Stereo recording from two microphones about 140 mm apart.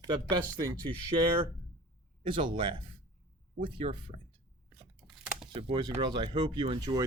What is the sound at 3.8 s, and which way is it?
Speech, 45° right (ahead or behind).